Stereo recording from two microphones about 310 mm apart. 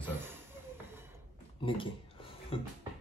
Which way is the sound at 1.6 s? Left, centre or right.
Centre.